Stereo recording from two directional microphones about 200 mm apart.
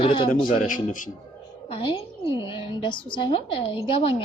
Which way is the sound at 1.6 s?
25° left (ahead or behind).